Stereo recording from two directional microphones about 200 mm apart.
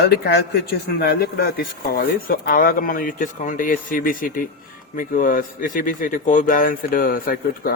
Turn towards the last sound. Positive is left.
turn(degrees=45)  # may be behind; listen again after turning